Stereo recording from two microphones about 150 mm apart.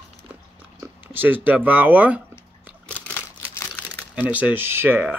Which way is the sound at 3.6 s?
15° left (ahead or behind).